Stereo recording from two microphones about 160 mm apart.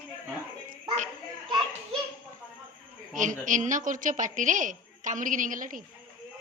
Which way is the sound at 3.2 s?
55° right (ahead or behind).